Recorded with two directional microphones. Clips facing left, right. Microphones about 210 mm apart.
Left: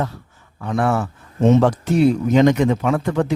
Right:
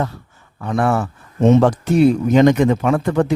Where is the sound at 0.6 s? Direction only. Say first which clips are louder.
Right 2 dB; 55° right (ahead or behind).